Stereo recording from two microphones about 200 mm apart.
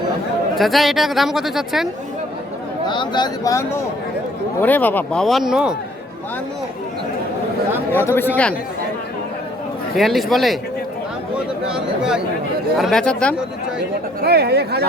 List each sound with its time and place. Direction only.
0.5 s speech: centre (ahead or behind)
2.8 s speech: 20° left (ahead or behind); by 5.7 s 5° right (ahead or behind)
7.9 s speech: 10° left (ahead or behind)
9.9 s speech: centre (ahead or behind)
11.7 s speech: 5° right (ahead or behind)
14.2 s speech: 55° right (ahead or behind)